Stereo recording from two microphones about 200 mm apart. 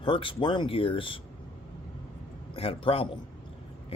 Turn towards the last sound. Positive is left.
turn(degrees=30)  # may be behind; listen again after turning